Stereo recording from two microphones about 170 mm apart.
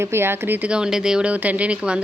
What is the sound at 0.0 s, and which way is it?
Speech, 15° right (ahead or behind).